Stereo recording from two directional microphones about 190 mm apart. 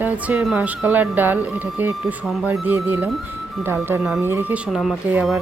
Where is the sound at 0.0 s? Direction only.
5° right (ahead or behind).